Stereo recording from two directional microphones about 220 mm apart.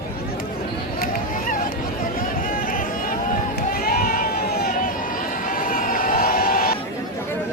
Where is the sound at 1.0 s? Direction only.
40° left (ahead or behind).